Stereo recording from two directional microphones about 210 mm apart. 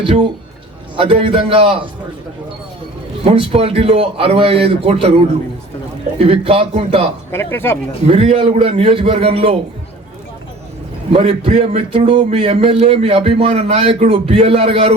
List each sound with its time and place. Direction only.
0.0 s speech: 25° right (ahead or behind)
3.2 s speech: 25° right (ahead or behind)
6.1 s speech: 30° right (ahead or behind)
7.3 s speech: 10° left (ahead or behind)
8.0 s speech: 30° right (ahead or behind)
11.1 s speech: 30° right (ahead or behind)